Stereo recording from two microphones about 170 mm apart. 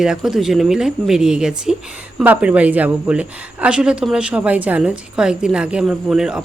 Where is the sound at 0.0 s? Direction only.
5° right (ahead or behind).